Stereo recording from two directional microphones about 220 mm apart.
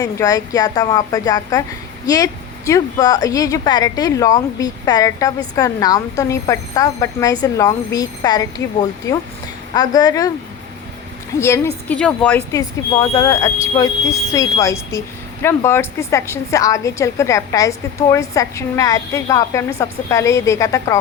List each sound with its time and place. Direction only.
0.0 s speech: 15° left (ahead or behind)
11.3 s speech: 10° left (ahead or behind)